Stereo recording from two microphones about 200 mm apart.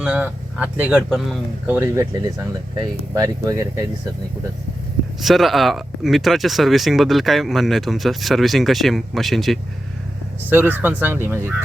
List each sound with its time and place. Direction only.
0.0 s speech: 5° right (ahead or behind)
5.2 s speech: centre (ahead or behind)